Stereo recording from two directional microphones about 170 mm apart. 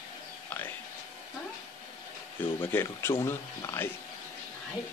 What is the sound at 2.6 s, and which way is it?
Speech, 15° left (ahead or behind).